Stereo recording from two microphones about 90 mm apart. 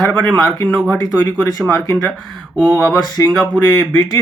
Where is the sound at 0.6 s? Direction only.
10° right (ahead or behind).